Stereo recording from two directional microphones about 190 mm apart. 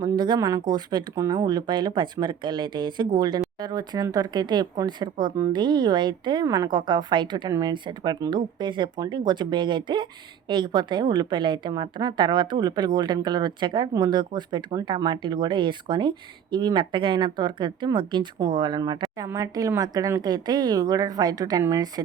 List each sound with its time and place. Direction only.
0.0 s a woman's voice: 20° right (ahead or behind)